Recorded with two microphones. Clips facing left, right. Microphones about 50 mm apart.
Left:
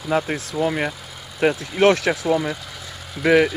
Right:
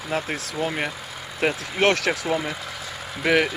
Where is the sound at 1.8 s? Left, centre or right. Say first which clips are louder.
Left 4 dB; right.